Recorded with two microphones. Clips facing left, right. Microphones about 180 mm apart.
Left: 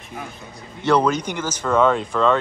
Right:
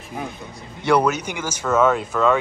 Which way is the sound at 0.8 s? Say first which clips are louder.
Even; 10° right (ahead or behind).